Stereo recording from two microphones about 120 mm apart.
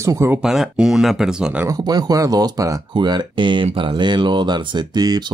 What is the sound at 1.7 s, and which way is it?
Speech, 35° right (ahead or behind).